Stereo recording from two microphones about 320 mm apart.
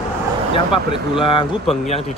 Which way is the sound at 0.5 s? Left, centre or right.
Centre.